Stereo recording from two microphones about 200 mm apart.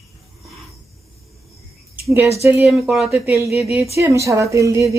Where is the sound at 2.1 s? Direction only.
15° right (ahead or behind).